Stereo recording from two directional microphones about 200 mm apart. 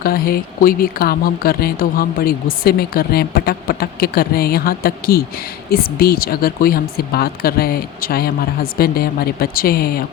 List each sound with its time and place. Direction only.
0.0 s speech: 50° left (ahead or behind)